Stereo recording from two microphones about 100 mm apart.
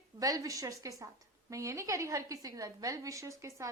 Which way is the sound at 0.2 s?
35° right (ahead or behind).